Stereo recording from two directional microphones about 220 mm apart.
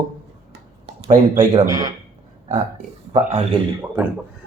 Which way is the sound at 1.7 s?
15° right (ahead or behind).